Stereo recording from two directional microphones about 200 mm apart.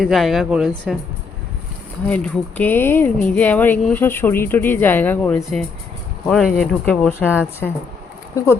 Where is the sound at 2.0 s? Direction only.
5° left (ahead or behind).